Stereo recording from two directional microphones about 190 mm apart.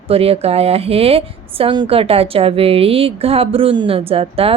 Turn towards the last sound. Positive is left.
turn(degrees=-30)  # may be behind; listen again after turning